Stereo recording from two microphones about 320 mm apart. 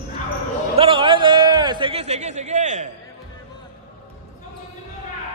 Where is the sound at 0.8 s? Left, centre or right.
Centre.